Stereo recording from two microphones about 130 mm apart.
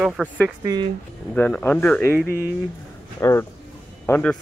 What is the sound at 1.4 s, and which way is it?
Speech, 15° left (ahead or behind).